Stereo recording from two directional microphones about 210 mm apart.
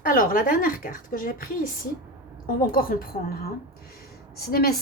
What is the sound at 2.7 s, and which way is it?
A woman's voice, 45° left (ahead or behind).